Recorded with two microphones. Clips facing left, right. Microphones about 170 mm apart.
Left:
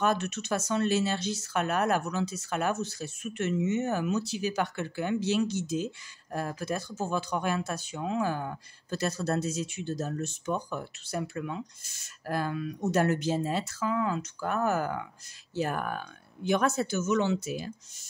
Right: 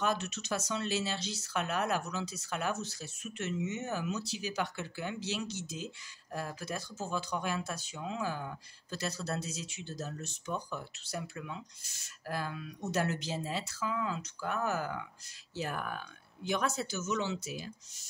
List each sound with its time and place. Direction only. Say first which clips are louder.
0.0 s speech: left 5 dB; 55° left (ahead or behind)